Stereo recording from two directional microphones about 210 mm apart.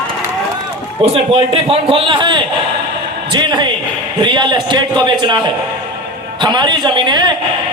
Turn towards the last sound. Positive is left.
turn(degrees=-20)  # may be behind; listen again after turning